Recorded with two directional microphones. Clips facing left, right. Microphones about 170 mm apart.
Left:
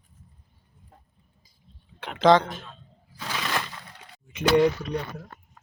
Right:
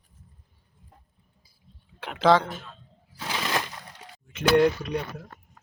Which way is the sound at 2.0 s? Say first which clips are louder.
Left 2 dB; 5° right (ahead or behind).